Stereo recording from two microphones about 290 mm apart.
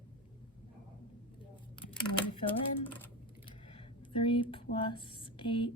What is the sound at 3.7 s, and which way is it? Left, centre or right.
Speech, centre.